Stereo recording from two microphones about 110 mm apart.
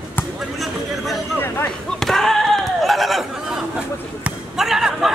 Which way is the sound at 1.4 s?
20° left (ahead or behind).